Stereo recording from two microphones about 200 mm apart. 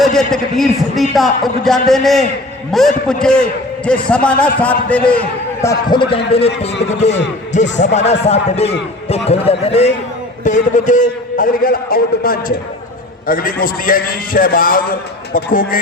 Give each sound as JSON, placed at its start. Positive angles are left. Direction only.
{"t": 0.0, "sound": "a man's voice", "side_deg": 5}
{"t": 5.6, "sound": "a man's voice", "side_deg": 25}